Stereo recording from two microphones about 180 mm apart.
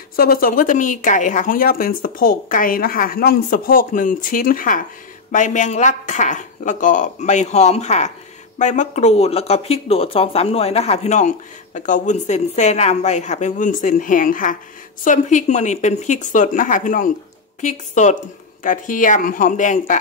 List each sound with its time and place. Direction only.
0.1 s speech: 55° left (ahead or behind)